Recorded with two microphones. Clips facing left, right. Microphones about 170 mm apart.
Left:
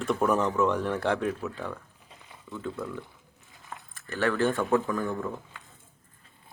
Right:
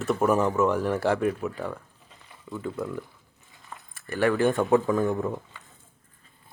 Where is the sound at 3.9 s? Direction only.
10° right (ahead or behind).